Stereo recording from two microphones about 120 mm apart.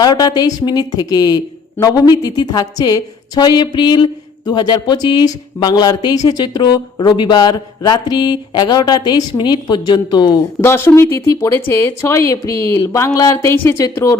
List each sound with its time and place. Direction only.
0.0 s a woman's voice: 35° left (ahead or behind)
10.6 s speech: 20° left (ahead or behind)